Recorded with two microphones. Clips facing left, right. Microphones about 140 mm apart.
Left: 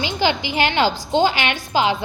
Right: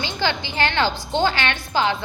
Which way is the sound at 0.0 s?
15° left (ahead or behind).